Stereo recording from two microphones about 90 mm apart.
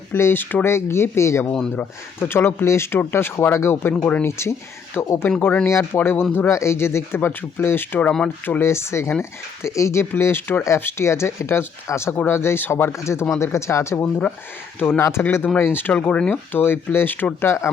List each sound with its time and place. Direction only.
0.1 s speech: 25° left (ahead or behind)